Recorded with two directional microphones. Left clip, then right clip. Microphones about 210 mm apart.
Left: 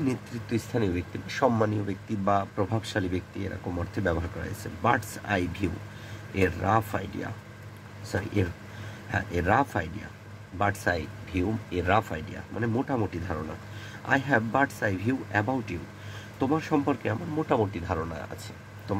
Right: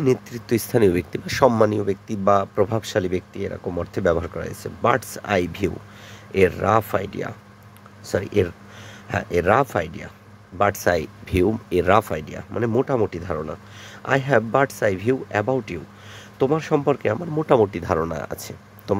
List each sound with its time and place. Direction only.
0.0 s speech: 45° right (ahead or behind)